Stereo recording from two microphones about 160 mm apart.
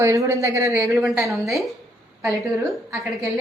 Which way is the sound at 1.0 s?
Centre (ahead or behind).